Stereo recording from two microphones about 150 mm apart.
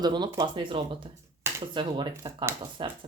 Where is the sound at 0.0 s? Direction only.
30° right (ahead or behind).